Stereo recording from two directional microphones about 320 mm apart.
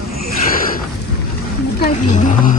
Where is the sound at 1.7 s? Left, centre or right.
Left.